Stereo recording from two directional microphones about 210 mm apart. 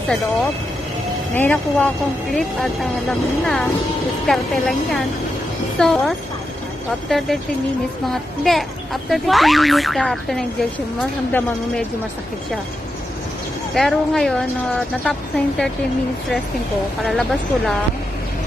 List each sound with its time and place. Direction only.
1.3 s a child's voice: 10° left (ahead or behind)
13.7 s a child's voice: centre (ahead or behind)
17.0 s a child's voice: centre (ahead or behind)